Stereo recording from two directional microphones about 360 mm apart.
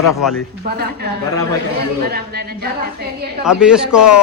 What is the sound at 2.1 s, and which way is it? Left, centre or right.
Speech, right.